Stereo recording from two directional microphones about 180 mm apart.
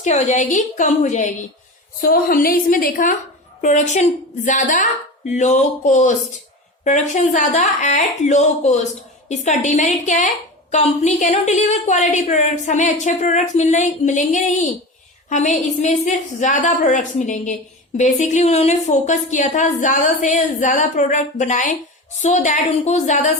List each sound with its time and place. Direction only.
0.0 s a woman's voice: 40° left (ahead or behind)
2.0 s a woman's voice: 55° left (ahead or behind)